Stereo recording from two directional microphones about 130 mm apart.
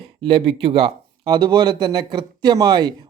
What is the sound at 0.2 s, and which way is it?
Speech, 40° right (ahead or behind).